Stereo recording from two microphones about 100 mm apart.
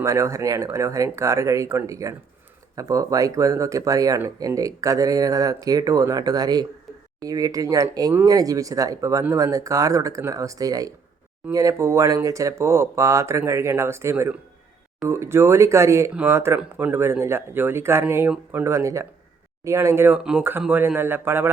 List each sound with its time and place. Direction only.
0.0 s speech: 30° right (ahead or behind)
20.1 s speech: 10° right (ahead or behind)